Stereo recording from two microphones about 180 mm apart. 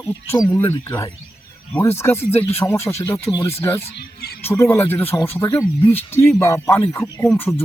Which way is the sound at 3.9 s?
60° left (ahead or behind).